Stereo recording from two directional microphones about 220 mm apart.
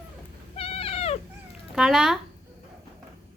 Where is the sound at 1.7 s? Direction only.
5° right (ahead or behind).